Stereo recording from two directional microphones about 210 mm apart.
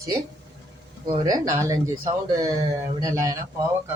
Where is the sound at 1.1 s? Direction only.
20° right (ahead or behind).